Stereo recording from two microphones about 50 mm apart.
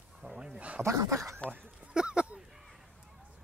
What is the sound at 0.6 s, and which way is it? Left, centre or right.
Dog, right.